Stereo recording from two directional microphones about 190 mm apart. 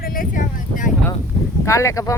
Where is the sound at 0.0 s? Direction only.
50° left (ahead or behind).